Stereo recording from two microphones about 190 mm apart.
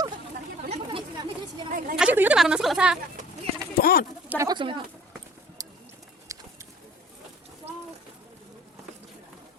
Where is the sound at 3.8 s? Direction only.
50° left (ahead or behind).